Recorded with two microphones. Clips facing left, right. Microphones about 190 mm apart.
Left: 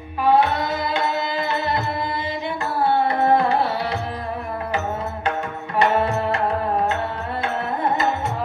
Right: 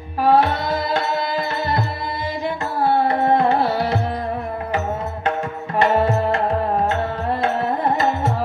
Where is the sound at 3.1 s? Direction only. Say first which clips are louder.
Right 1 dB; 30° right (ahead or behind).